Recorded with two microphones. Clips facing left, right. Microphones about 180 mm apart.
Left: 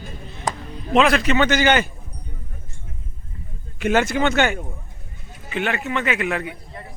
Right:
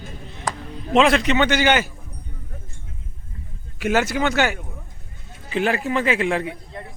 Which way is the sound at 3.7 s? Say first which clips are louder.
Left 1 dB; 5° right (ahead or behind).